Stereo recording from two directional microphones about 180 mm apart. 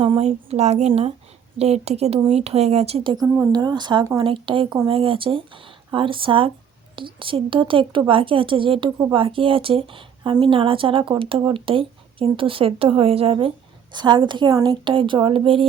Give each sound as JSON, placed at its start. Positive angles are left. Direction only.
{"t": 0.0, "sound": "speech", "side_deg": -35}
{"t": 3.2, "sound": "speech", "side_deg": -10}
{"t": 3.5, "sound": "a woman's voice", "side_deg": -20}